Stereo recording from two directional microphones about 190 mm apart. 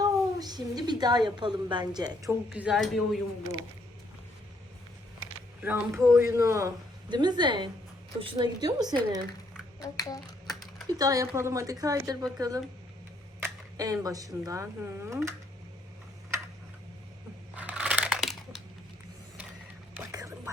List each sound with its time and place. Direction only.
0.0 s a woman's voice: 20° right (ahead or behind)
2.5 s speech: 5° right (ahead or behind)
5.6 s speech: 10° right (ahead or behind)
9.8 s speech: 20° left (ahead or behind)
10.4 s typing: centre (ahead or behind)
10.8 s speech: 20° right (ahead or behind)
17.6 s crushing: 10° right (ahead or behind)
20.0 s whispering: 15° right (ahead or behind)